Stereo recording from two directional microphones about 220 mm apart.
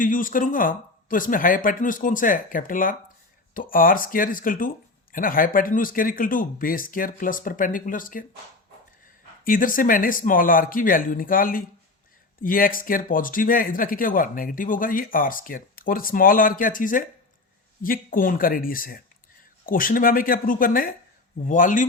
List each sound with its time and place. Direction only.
0.0 s speech: 40° left (ahead or behind)
9.4 s speech: 40° left (ahead or behind)